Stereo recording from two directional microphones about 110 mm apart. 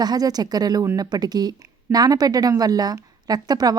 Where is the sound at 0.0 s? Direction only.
35° right (ahead or behind).